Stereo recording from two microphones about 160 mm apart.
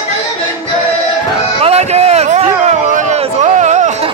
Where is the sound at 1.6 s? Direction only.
40° right (ahead or behind).